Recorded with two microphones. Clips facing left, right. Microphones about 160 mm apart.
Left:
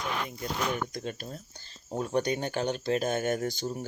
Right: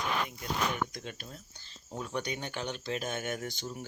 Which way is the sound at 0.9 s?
40° left (ahead or behind).